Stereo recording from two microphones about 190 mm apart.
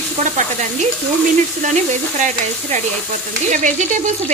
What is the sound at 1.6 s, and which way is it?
A woman's voice, 40° right (ahead or behind).